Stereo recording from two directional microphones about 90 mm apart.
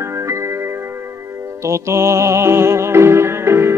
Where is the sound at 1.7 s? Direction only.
30° right (ahead or behind).